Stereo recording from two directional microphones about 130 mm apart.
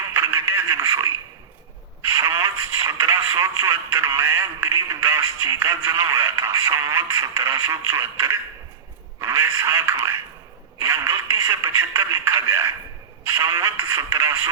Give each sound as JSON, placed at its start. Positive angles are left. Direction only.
{"t": 0.1, "sound": "radio", "side_deg": -20}
{"t": 2.0, "sound": "speech", "side_deg": -20}